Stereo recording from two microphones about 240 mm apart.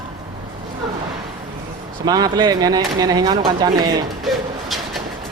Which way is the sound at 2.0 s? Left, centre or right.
Centre.